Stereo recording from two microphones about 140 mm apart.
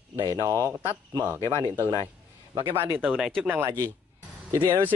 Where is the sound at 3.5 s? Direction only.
15° right (ahead or behind).